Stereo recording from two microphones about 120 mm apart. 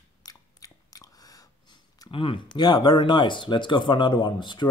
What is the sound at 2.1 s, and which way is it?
Speech, 45° left (ahead or behind).